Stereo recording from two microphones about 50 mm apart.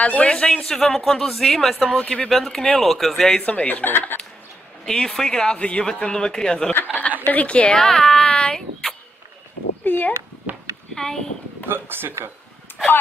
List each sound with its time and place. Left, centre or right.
0.0 s a man's voice: left
0.3 s a woman's voice: centre
1.9 s a woman's voice: left
2.2 s speech: centre
3.3 s a woman's voice: left
3.6 s speech: left
4.8 s speech: centre
7.2 s a woman's voice: left
7.8 s a sound: centre
9.8 s speech: left
11.0 s speech: centre
11.6 s speech: right